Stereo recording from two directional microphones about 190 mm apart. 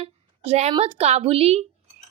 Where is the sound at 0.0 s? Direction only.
35° right (ahead or behind).